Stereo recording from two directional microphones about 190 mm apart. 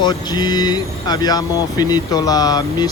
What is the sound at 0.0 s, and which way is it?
Speech, 20° left (ahead or behind).